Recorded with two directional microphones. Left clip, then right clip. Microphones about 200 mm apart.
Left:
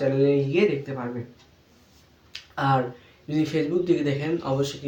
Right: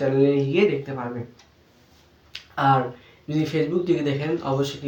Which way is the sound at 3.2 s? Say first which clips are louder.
Right 1 dB; centre (ahead or behind).